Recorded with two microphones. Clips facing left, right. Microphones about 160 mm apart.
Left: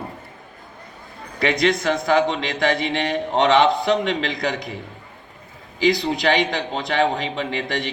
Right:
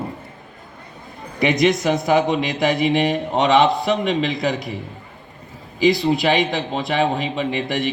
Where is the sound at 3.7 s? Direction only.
20° left (ahead or behind).